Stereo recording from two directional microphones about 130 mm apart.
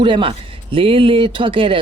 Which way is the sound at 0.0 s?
40° right (ahead or behind).